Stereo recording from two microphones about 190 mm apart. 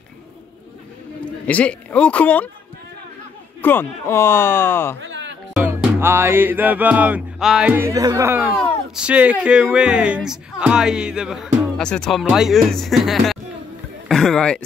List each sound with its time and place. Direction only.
1.5 s speech: 5° left (ahead or behind)
3.6 s speech: 10° left (ahead or behind)
5.0 s music: 75° right (ahead or behind)
5.5 s music: 10° right (ahead or behind)
8.5 s speech: 5° right (ahead or behind)
14.0 s a sound: centre (ahead or behind)